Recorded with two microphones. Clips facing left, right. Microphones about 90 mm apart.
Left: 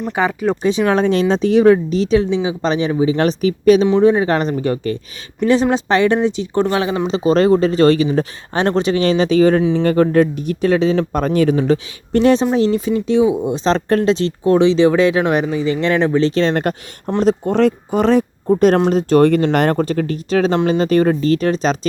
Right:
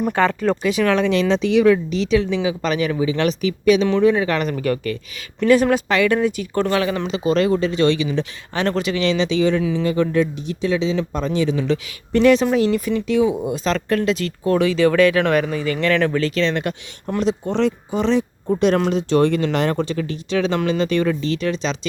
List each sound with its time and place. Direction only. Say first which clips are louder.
0.1 s speech: left 3 dB; 15° left (ahead or behind)
0.6 s speech: left 4 dB; 30° left (ahead or behind)
7.1 s speech: left 6 dB; 35° left (ahead or behind)